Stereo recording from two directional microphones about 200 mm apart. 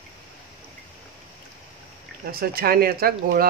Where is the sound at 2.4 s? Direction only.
50° right (ahead or behind).